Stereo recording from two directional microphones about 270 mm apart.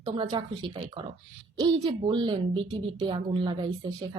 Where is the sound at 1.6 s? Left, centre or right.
Centre.